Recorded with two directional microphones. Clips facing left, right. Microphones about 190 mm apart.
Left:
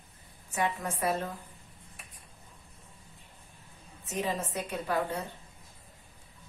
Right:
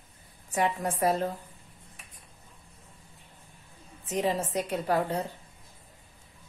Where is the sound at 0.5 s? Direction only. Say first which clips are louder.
Right 4 dB; 30° right (ahead or behind).